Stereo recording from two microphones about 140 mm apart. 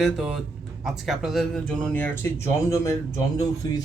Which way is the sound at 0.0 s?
5° right (ahead or behind).